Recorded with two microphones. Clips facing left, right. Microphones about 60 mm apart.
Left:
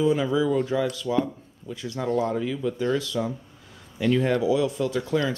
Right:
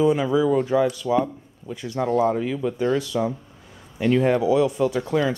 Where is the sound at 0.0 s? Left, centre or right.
Centre.